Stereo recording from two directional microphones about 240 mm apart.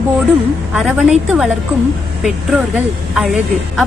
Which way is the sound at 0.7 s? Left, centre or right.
Centre.